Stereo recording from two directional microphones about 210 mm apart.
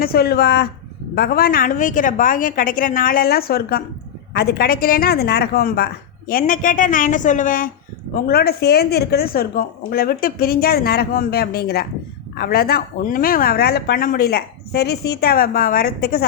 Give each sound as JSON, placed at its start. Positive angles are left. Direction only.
{"t": 0.0, "sound": "a woman's voice", "side_deg": 45}